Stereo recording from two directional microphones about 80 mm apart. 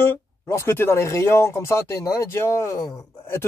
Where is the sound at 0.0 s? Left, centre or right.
Left.